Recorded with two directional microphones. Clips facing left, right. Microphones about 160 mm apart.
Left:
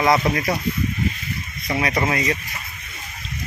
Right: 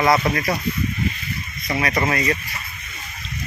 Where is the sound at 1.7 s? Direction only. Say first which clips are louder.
Even; 15° left (ahead or behind).